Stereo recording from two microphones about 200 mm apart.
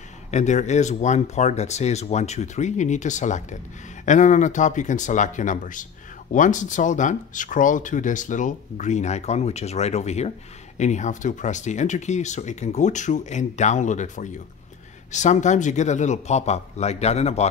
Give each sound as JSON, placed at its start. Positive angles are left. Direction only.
{"t": 0.3, "sound": "speech", "side_deg": 35}